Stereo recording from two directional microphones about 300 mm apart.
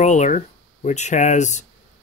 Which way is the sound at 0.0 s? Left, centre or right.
Left.